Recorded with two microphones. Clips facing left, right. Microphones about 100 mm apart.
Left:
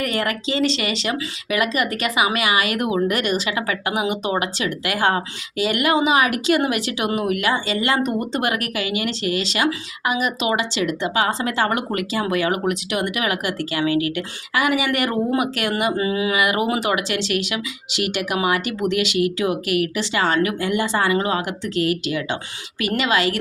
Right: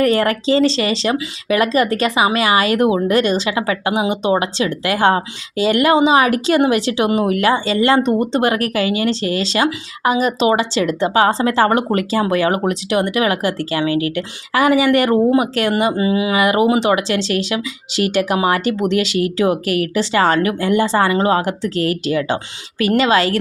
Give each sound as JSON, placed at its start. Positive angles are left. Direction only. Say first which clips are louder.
{"t": 0.0, "sound": "speech", "louder": "right 8 dB", "side_deg": -35}